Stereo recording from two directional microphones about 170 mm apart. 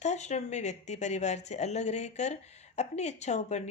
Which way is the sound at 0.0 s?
45° left (ahead or behind).